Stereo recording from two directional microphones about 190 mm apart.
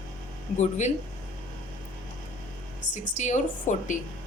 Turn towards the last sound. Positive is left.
turn(degrees=40)  # may be behind; listen again after turning